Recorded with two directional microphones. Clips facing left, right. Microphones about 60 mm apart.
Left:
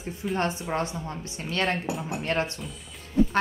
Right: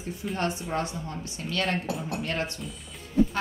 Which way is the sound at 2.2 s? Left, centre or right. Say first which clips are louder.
Left 6 dB; left.